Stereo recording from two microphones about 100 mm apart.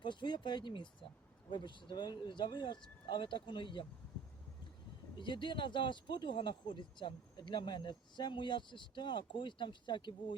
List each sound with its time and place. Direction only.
0.0 s speech: 50° left (ahead or behind)
5.2 s speech: 55° left (ahead or behind)